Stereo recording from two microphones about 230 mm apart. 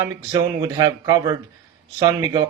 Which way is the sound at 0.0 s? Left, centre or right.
Centre.